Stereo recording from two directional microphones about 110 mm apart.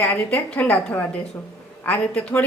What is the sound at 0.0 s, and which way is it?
A woman's voice, 15° left (ahead or behind).